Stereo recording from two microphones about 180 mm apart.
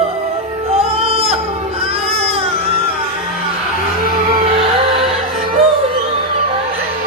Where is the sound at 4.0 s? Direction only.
55° right (ahead or behind).